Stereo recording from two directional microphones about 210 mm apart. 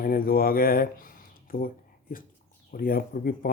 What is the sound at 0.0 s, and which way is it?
Speech, 45° left (ahead or behind).